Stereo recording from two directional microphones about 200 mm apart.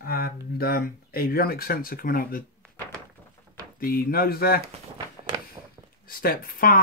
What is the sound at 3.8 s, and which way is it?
Speech, 45° left (ahead or behind).